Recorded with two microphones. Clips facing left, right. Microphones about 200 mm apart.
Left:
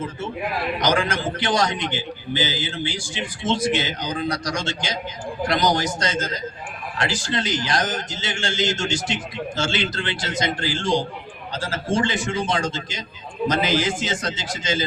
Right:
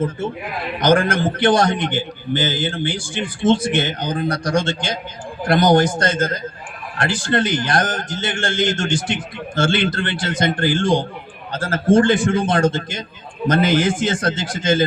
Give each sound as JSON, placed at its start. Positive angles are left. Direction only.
{"t": 0.8, "sound": "a man's voice", "side_deg": -55}